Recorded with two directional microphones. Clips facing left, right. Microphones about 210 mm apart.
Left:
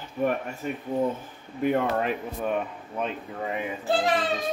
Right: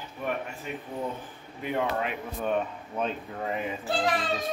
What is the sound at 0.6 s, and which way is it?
Speech, 45° left (ahead or behind).